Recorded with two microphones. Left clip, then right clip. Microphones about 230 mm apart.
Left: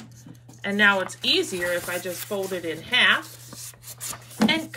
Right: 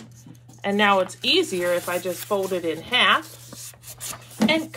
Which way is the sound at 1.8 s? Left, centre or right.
Right.